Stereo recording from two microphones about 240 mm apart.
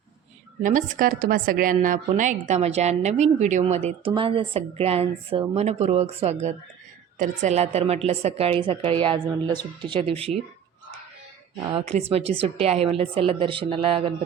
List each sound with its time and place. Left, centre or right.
0.6 s a woman's voice: right
11.6 s a woman's voice: right